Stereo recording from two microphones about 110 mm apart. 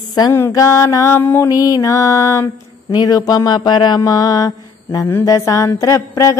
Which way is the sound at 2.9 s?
35° left (ahead or behind).